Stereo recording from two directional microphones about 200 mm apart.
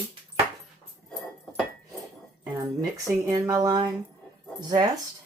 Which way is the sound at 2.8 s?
15° right (ahead or behind).